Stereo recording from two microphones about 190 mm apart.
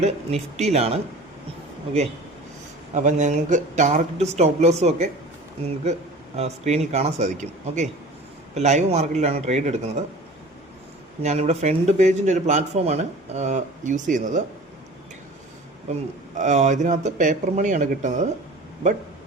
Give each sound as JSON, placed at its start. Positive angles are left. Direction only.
{"t": 0.0, "sound": "speech", "side_deg": -35}
{"t": 2.9, "sound": "speech", "side_deg": -40}
{"t": 6.3, "sound": "speech", "side_deg": -35}
{"t": 11.2, "sound": "speech", "side_deg": -35}
{"t": 16.3, "sound": "speech", "side_deg": -40}